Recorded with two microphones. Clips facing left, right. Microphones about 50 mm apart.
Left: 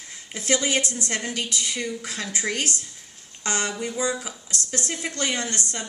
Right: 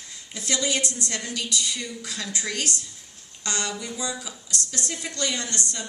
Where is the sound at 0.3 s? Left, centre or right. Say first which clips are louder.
Left 3 dB; left.